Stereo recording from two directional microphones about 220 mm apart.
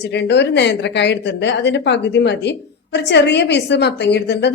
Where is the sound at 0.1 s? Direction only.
50° left (ahead or behind).